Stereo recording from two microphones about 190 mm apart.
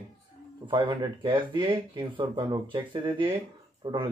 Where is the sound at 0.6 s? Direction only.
25° right (ahead or behind).